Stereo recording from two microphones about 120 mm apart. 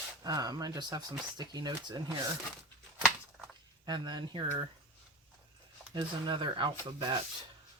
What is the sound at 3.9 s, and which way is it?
Speech, 40° right (ahead or behind).